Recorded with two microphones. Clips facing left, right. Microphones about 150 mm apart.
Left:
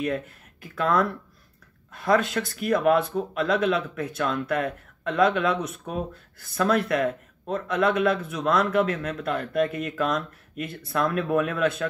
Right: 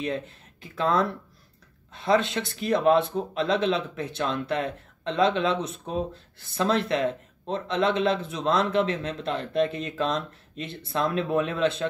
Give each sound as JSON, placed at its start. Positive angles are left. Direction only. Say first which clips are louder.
{"t": 0.0, "sound": "speech", "louder": "left 2 dB", "side_deg": -25}